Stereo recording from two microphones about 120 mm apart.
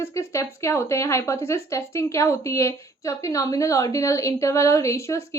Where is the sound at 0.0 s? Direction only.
25° left (ahead or behind).